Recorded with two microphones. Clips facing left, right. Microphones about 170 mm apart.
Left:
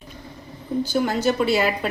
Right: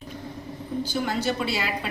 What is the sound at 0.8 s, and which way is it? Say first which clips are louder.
Speech: left 6 dB; 45° left (ahead or behind).